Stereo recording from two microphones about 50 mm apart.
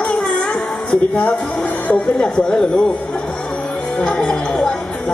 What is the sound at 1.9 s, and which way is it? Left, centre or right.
Speech, centre.